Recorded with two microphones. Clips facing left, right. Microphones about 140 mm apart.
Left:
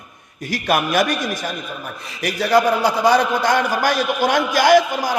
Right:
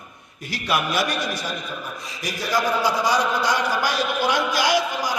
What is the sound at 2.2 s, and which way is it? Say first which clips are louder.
A man's voice: left 8 dB; 65° left (ahead or behind).